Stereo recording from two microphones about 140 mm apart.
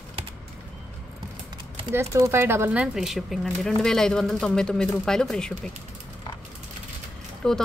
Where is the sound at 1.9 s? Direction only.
20° right (ahead or behind); by 5.5 s 5° left (ahead or behind).